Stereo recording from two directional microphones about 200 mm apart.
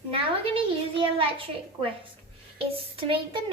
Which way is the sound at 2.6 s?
25° right (ahead or behind).